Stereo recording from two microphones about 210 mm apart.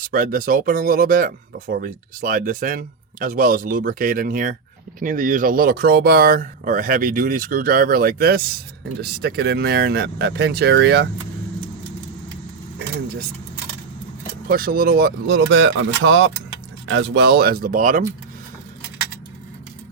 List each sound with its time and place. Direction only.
0.1 s speech: 40° right (ahead or behind)
14.4 s speech: 45° right (ahead or behind); by 16.3 s 70° right (ahead or behind)
16.9 s speech: 55° right (ahead or behind); by 18.0 s 40° right (ahead or behind)